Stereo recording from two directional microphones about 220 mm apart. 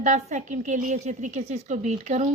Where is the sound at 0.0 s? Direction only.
30° right (ahead or behind).